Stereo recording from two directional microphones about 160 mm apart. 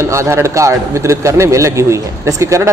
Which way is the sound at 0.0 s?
20° right (ahead or behind).